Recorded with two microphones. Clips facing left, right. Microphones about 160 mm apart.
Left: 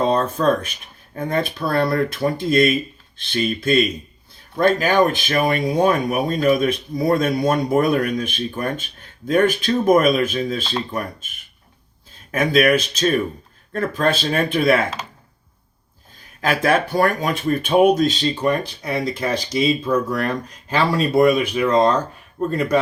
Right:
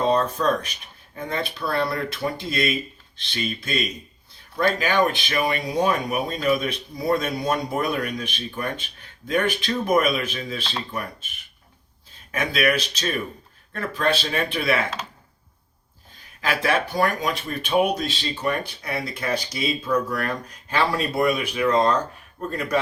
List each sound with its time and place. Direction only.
0.1 s speech: 50° left (ahead or behind)
12.3 s speech: 45° left (ahead or behind)
16.4 s speech: 45° left (ahead or behind)
18.8 s speech: 30° left (ahead or behind)